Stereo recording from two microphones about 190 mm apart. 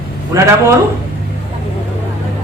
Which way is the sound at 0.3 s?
15° right (ahead or behind).